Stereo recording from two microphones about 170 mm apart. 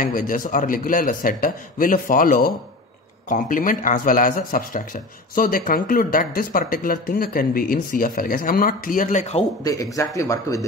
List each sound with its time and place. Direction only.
0.0 s a man's voice: 50° left (ahead or behind)
9.6 s a man's voice: 20° left (ahead or behind)